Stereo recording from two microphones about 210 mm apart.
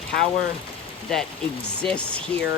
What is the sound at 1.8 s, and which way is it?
Speech, 5° left (ahead or behind).